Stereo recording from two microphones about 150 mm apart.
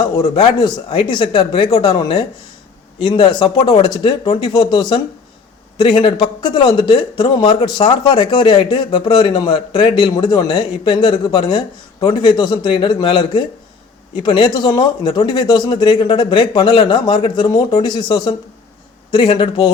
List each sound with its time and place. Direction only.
0.0 s speech: 35° left (ahead or behind)